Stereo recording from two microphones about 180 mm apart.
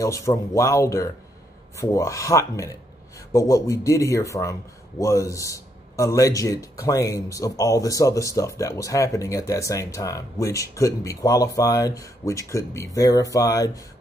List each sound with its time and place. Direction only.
0.0 s a man's voice: 15° left (ahead or behind)